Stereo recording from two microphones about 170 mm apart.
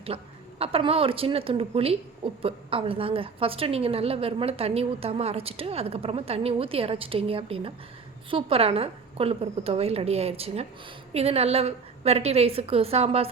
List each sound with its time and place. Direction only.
0.1 s a woman's voice: 35° right (ahead or behind)